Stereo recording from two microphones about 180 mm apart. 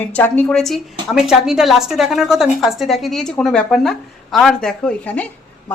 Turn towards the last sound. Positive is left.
turn(degrees=10)  # may be behind; listen again after turning